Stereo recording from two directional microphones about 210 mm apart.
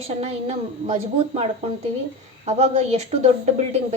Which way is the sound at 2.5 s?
30° right (ahead or behind).